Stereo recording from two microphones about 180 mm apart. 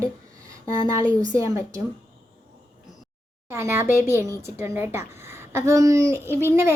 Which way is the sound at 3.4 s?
15° right (ahead or behind).